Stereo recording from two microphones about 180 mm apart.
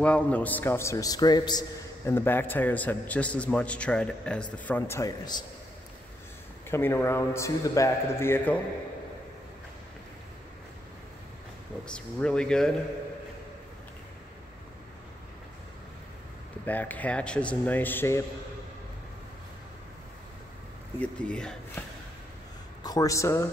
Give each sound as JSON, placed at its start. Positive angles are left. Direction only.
{"t": 0.0, "sound": "a man's voice", "side_deg": 5}
{"t": 6.7, "sound": "a man's voice", "side_deg": 15}
{"t": 11.9, "sound": "speech", "side_deg": 5}
{"t": 16.6, "sound": "a man's voice", "side_deg": 10}
{"t": 21.0, "sound": "a man's voice", "side_deg": 5}
{"t": 22.8, "sound": "a man's voice", "side_deg": 20}